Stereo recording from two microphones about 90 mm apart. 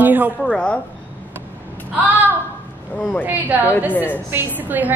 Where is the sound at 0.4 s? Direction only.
10° left (ahead or behind).